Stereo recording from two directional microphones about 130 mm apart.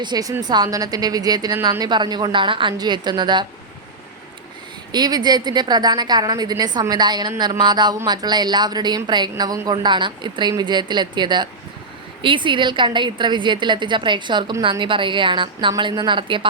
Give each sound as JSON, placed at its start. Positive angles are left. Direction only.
{"t": 0.0, "sound": "a woman's voice", "side_deg": -30}
{"t": 4.9, "sound": "a woman's voice", "side_deg": -30}